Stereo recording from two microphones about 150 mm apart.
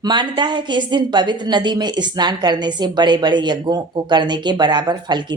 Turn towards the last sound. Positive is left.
turn(degrees=-30)  # may be behind; listen again after turning